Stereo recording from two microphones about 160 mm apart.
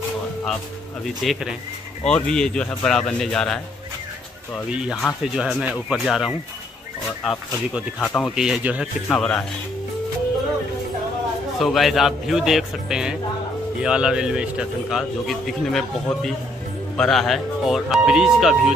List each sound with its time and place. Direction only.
1.0 s a man's voice: centre (ahead or behind)
4.7 s a man's voice: 5° right (ahead or behind)
11.6 s a man's voice: centre (ahead or behind)